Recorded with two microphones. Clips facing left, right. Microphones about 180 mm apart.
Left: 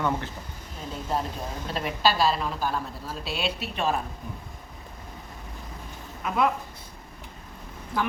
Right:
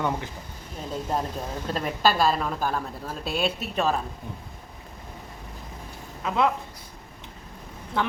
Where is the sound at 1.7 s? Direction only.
50° right (ahead or behind).